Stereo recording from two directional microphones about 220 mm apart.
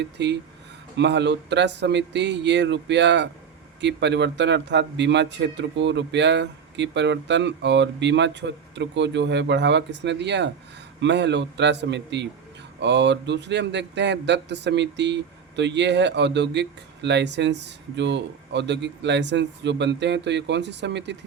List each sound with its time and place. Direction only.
0.0 s speech: 50° right (ahead or behind)